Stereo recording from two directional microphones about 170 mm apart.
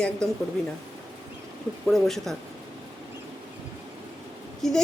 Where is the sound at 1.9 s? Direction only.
Centre (ahead or behind).